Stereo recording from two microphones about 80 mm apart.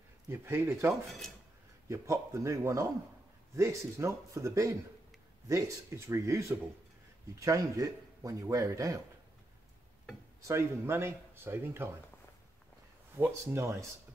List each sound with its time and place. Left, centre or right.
0.3 s speech: right
10.4 s speech: right
13.1 s speech: right